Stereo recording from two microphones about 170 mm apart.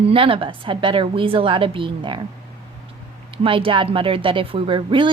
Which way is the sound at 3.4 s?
30° right (ahead or behind).